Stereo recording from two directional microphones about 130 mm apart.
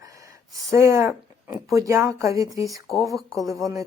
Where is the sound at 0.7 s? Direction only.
20° right (ahead or behind).